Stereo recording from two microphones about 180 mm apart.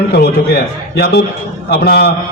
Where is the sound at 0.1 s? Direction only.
65° left (ahead or behind).